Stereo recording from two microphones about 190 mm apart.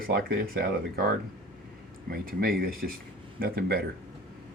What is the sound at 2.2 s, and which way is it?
Speech, 50° right (ahead or behind).